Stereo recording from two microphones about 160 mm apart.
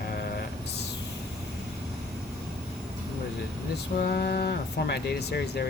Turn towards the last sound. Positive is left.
turn(degrees=90)